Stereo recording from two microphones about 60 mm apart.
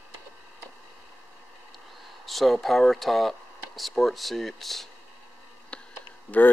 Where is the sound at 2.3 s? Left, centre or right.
Centre.